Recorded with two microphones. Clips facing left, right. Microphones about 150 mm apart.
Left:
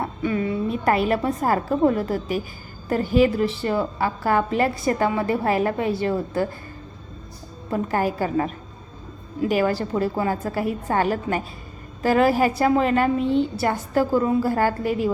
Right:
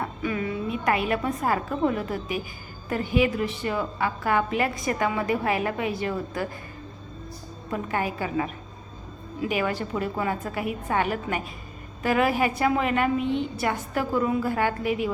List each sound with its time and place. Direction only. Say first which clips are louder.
0.2 s a woman's voice: left 6 dB; 30° left (ahead or behind)
7.7 s a woman's voice: left 5 dB; 40° left (ahead or behind)